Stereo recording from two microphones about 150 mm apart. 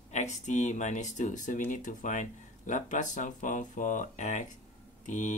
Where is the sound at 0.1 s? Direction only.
50° left (ahead or behind).